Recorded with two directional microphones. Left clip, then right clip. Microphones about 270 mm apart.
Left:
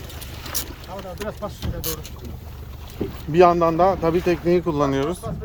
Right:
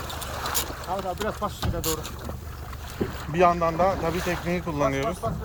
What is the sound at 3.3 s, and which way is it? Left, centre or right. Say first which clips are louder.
Speech: left 6 dB; left.